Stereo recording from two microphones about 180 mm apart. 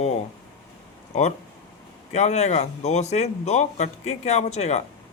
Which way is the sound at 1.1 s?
40° left (ahead or behind).